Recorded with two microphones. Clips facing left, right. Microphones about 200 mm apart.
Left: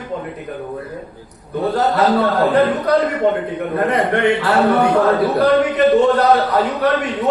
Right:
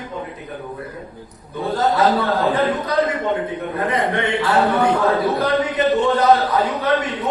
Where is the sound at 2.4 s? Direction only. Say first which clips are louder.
Left 4 dB; 65° left (ahead or behind).